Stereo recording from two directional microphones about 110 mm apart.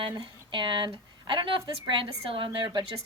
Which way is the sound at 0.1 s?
45° right (ahead or behind).